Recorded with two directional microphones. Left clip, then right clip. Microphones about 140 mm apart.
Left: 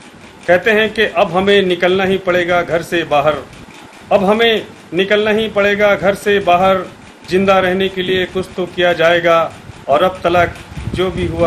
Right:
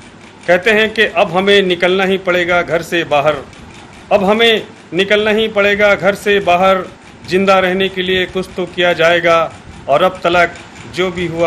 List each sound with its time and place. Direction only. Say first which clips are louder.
0.5 s a man's voice: right 1 dB; centre (ahead or behind)